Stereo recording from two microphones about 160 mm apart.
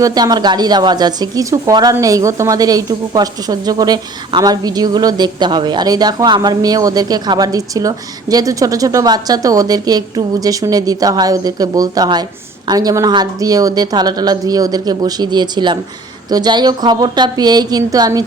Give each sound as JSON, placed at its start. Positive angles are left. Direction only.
{"t": 0.0, "sound": "speech", "side_deg": -25}